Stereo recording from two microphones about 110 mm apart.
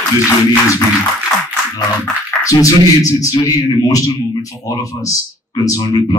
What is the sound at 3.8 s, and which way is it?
Speech, 45° left (ahead or behind).